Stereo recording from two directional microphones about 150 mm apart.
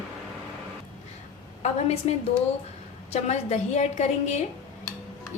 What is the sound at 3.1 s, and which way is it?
A woman's voice, 50° left (ahead or behind).